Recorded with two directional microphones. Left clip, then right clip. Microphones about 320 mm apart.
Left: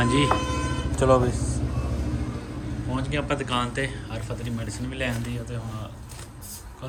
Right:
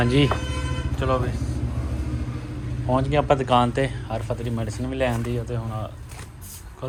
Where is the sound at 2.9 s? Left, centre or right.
Centre.